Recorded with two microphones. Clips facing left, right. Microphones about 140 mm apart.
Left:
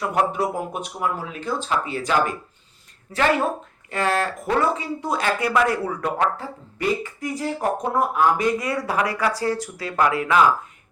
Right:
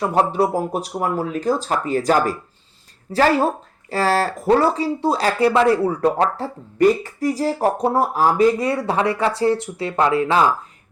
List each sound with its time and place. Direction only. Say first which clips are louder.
0.0 s speech: right 4 dB; 30° right (ahead or behind)